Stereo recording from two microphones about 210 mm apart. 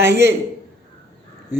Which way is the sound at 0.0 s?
10° right (ahead or behind).